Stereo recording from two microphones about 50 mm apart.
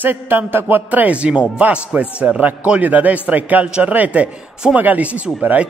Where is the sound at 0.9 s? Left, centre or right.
Right.